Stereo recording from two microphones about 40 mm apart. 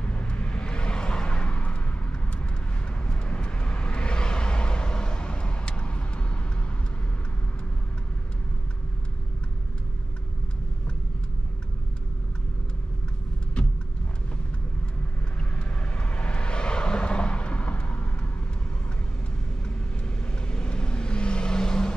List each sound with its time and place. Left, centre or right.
0.0 s vehicle: left
3.1 s vehicle: left
13.6 s vehicle: left
15.5 s vehicle: left
20.3 s vehicle: left